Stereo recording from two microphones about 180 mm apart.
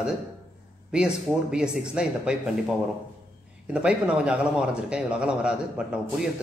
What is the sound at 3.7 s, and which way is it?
A man's voice, 5° right (ahead or behind).